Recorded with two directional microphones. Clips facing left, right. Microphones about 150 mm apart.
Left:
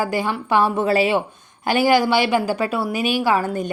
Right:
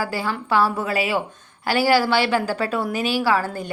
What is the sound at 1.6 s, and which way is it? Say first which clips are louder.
A woman's voice: left 2 dB; 20° left (ahead or behind).